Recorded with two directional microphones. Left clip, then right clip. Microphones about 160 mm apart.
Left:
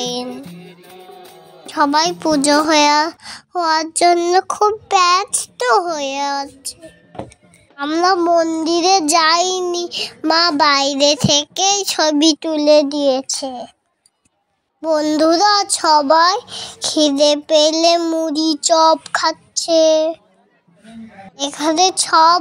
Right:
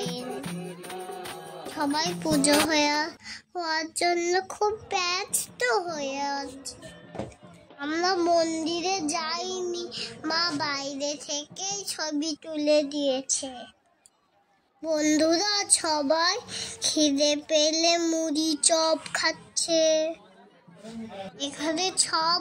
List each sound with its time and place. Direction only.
0.0 s music: 55° left (ahead or behind)
0.7 s music: 30° left (ahead or behind)
1.7 s a woman's voice: 50° left (ahead or behind)
7.7 s child singing: 45° left (ahead or behind)
8.6 s child singing: 55° left (ahead or behind)
14.8 s child singing: 35° left (ahead or behind)
16.6 s a woman's voice: 45° left (ahead or behind)
18.0 s child singing: 25° left (ahead or behind)
21.4 s a woman's voice: 50° left (ahead or behind)